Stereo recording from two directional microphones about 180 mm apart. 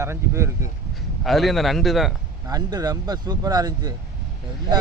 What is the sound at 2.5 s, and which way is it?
Speech, 20° right (ahead or behind).